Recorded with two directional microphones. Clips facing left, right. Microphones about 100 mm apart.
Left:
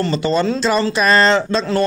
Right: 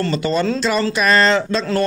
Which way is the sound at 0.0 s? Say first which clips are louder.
Left 1 dB; 25° left (ahead or behind).